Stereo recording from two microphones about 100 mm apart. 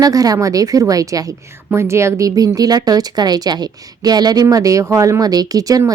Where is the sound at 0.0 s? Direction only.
35° right (ahead or behind).